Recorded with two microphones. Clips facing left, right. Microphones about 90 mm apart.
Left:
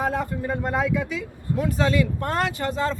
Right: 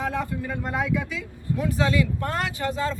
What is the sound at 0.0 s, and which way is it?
Speech, 45° left (ahead or behind).